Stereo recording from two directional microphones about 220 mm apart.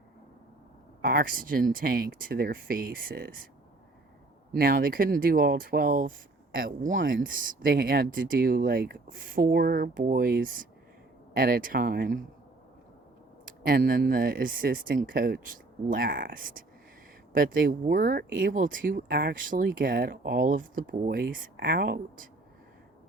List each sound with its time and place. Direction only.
1.0 s speech: 40° right (ahead or behind)
4.6 s speech: 40° right (ahead or behind)
6.8 s speech: 60° right (ahead or behind)
7.3 s speech: 40° right (ahead or behind)
13.4 s speech: 45° right (ahead or behind)